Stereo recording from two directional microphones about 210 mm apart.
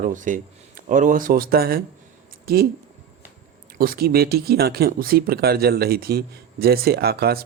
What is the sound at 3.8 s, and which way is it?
Speech, 45° right (ahead or behind).